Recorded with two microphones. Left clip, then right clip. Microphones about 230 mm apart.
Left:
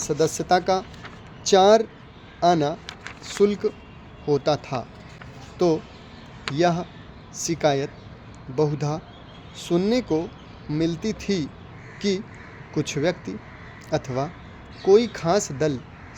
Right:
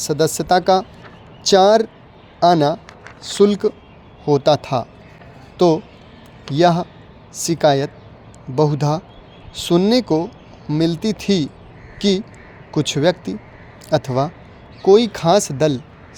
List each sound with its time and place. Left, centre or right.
0.0 s speech: right